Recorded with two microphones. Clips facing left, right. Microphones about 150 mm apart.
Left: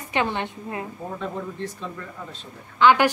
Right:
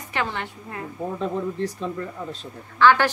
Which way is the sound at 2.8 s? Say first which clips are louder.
Even; 15° left (ahead or behind).